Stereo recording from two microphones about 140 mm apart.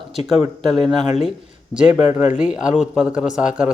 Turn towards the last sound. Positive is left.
turn(degrees=-5)  # may be behind; listen again after turning